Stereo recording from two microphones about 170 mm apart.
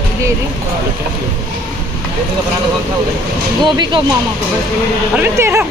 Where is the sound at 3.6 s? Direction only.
25° right (ahead or behind).